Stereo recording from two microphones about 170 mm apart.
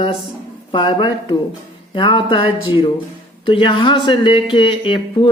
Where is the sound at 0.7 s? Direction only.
30° left (ahead or behind).